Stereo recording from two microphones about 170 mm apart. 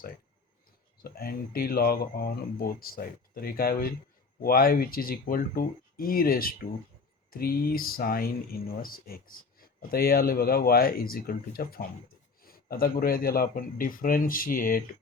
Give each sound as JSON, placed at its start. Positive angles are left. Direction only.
{"t": 1.0, "sound": "speech", "side_deg": 65}